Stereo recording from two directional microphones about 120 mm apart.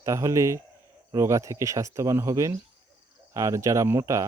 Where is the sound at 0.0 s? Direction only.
25° right (ahead or behind).